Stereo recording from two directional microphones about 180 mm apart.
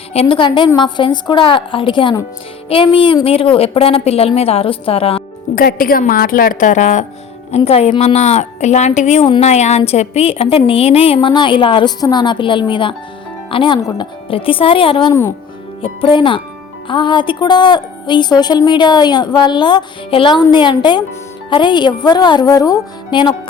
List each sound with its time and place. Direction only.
0.1 s a woman's voice: 30° left (ahead or behind)
5.5 s a woman's voice: 50° left (ahead or behind); by 23.3 s 20° left (ahead or behind)